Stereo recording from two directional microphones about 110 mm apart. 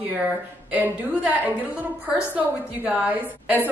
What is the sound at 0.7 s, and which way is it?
A woman's voice, 15° right (ahead or behind).